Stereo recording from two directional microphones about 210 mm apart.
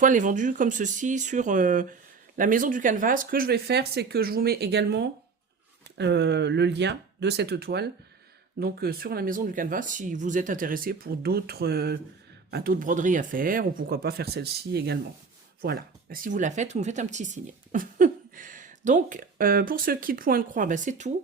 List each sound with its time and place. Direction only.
0.0 s speech: 40° right (ahead or behind)